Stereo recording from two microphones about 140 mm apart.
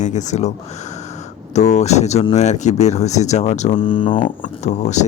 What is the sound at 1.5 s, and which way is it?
Speech, 55° left (ahead or behind).